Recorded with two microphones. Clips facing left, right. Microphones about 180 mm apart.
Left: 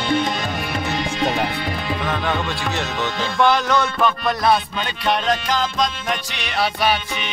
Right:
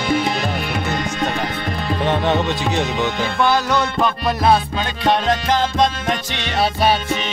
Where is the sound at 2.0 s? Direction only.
25° right (ahead or behind).